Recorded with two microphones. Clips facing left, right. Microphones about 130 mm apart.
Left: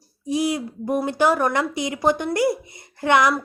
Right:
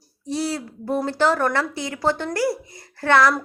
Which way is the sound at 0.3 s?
15° left (ahead or behind).